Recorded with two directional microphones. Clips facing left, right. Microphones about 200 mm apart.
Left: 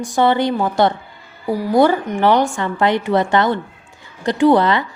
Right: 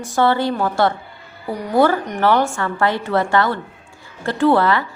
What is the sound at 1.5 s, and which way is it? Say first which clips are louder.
Speech: left 3 dB; 5° left (ahead or behind).